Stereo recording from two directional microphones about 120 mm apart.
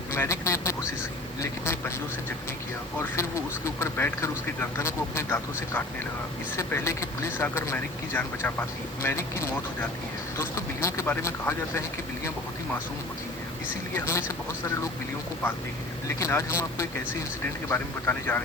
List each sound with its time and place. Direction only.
0.1 s speech: 25° left (ahead or behind)
3.0 s speech: 25° left (ahead or behind)
13.9 s speech: 20° left (ahead or behind)
16.0 s speech: 25° left (ahead or behind)